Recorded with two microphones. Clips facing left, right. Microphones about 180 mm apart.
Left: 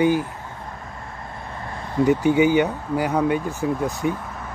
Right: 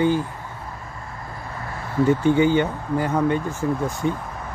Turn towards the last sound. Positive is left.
turn(degrees=10)  # may be behind; listen again after turning